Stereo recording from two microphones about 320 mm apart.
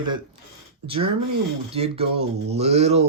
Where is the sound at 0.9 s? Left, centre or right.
Centre.